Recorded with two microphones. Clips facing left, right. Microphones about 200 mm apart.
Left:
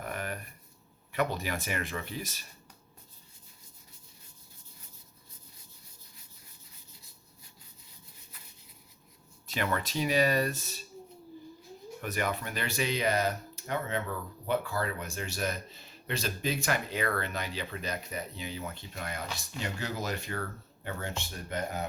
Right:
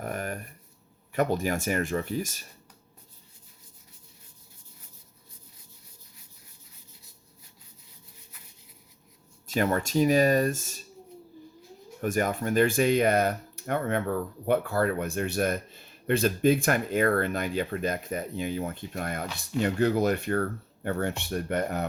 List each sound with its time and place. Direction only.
0.0 s a sound: 45° right (ahead or behind)
1.1 s speech: 45° right (ahead or behind)
9.5 s speech: 45° right (ahead or behind)
11.9 s speech: 45° right (ahead or behind); by 21.8 s 65° right (ahead or behind)